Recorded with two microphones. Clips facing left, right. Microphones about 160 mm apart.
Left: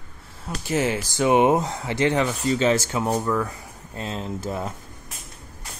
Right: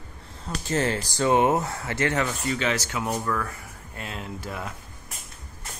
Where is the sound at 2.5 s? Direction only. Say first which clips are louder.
Left 6 dB; 30° left (ahead or behind).